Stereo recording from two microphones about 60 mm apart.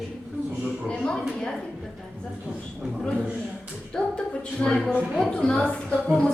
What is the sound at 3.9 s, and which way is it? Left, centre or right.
Speech, centre.